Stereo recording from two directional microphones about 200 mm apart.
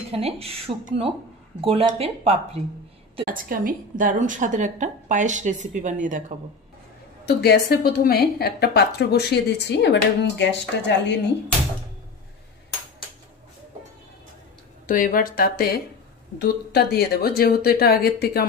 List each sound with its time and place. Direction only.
0.1 s speech: 30° right (ahead or behind)
3.3 s a woman's voice: 45° right (ahead or behind)
7.2 s a woman's voice: 55° left (ahead or behind)
14.9 s speech: 45° left (ahead or behind)